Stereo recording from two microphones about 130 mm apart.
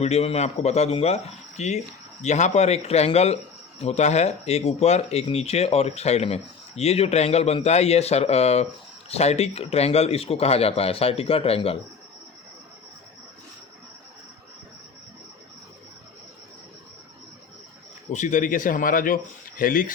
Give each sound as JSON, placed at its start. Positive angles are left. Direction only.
{"t": 0.0, "sound": "a man's voice", "side_deg": 55}
{"t": 18.1, "sound": "speech", "side_deg": 75}